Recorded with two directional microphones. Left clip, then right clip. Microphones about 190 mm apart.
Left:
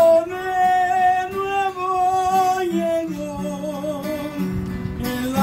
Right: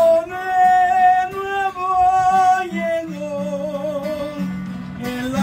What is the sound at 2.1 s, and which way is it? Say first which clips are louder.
Male singing: right 3 dB; 20° right (ahead or behind).